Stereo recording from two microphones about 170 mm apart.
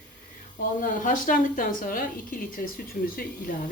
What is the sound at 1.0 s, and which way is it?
A woman's voice, 50° left (ahead or behind).